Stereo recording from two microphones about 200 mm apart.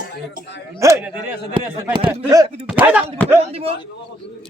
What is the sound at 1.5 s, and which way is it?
Speech, 25° right (ahead or behind).